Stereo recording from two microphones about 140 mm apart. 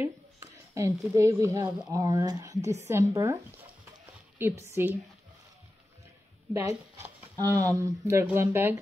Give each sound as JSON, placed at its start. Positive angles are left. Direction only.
{"t": 0.0, "sound": "a sound", "side_deg": -20}
{"t": 1.9, "sound": "speech", "side_deg": -25}
{"t": 4.4, "sound": "speech", "side_deg": -15}
{"t": 6.7, "sound": "speech", "side_deg": -25}